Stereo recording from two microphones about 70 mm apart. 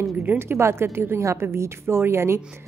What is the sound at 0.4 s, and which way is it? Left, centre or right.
A woman's voice, right.